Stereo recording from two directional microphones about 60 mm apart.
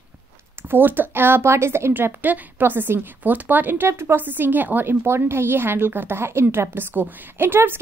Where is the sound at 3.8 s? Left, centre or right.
Right.